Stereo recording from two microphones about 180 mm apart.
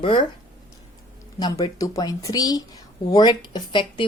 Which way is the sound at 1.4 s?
20° left (ahead or behind).